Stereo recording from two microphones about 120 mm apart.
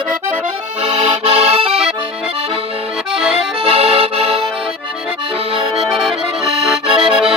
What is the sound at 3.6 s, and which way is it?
Accordion, 50° right (ahead or behind).